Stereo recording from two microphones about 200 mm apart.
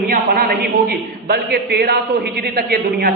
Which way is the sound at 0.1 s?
45° right (ahead or behind).